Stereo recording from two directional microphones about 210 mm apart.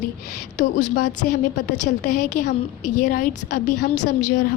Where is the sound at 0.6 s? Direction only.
35° left (ahead or behind).